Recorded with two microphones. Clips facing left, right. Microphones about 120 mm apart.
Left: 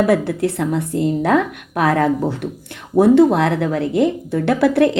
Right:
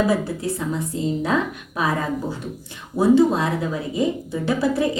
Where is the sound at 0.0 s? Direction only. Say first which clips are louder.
Left 5 dB; 65° left (ahead or behind).